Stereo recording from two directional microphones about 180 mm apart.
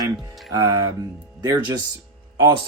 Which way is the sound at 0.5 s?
20° right (ahead or behind).